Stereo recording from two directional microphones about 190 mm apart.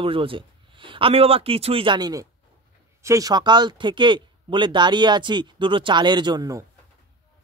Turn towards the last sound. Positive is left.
turn(degrees=-20)  # may be behind; listen again after turning